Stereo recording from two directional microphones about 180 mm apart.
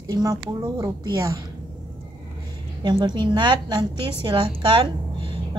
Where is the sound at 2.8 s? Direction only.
25° right (ahead or behind).